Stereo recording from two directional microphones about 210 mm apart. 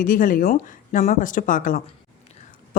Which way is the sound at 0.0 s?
40° left (ahead or behind).